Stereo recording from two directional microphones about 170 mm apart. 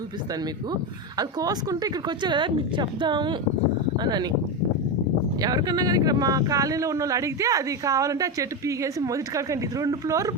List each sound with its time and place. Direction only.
0.7 s speech: 25° right (ahead or behind)
5.4 s speech: 20° right (ahead or behind)